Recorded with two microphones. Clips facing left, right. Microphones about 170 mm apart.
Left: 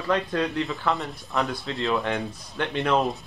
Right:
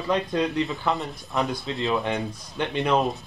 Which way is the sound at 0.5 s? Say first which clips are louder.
Right 1 dB; centre (ahead or behind).